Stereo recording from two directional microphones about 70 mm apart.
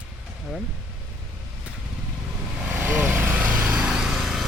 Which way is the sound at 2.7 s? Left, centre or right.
Right.